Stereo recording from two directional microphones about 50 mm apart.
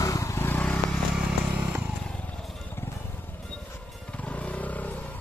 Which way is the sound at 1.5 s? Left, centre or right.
Right.